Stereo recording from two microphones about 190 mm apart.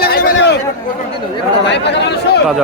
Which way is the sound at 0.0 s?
55° left (ahead or behind).